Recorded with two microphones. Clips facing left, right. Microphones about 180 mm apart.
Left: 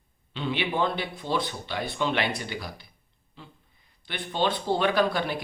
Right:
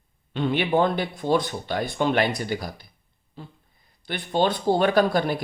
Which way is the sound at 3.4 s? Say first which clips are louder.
Right 6 dB; 40° right (ahead or behind).